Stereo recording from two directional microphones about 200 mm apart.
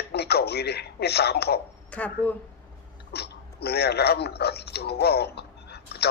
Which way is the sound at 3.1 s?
55° left (ahead or behind).